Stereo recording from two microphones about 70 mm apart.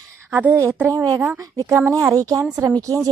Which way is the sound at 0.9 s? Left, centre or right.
Right.